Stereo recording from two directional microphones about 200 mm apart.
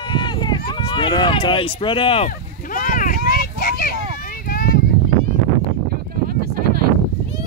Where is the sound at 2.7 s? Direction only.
40° left (ahead or behind).